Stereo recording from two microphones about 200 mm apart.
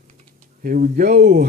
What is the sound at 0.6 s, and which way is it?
Speech, 45° right (ahead or behind).